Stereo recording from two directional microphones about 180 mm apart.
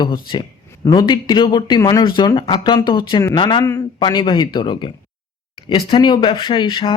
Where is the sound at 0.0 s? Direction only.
25° left (ahead or behind).